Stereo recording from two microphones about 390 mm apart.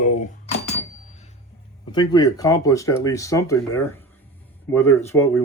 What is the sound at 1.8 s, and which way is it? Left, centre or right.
Speech, centre.